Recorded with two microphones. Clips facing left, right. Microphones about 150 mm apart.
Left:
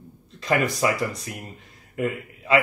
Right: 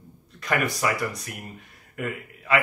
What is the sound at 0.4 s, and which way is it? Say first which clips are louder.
A man's voice: left 3 dB; 25° left (ahead or behind).